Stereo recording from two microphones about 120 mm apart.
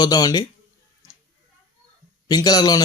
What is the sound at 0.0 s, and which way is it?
Speech, 30° left (ahead or behind).